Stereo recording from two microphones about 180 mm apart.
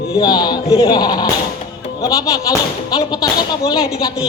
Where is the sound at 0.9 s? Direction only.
20° left (ahead or behind).